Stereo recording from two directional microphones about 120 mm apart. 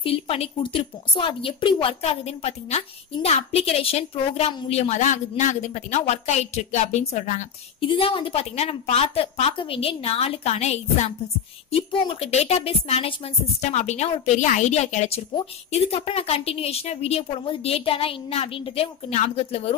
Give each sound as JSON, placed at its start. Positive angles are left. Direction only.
{"t": 0.0, "sound": "a woman's voice", "side_deg": 55}
{"t": 4.7, "sound": "a woman's voice", "side_deg": 70}
{"t": 7.8, "sound": "a woman's voice", "side_deg": 45}
{"t": 11.7, "sound": "a woman's voice", "side_deg": 50}
{"t": 14.2, "sound": "a woman's voice", "side_deg": 80}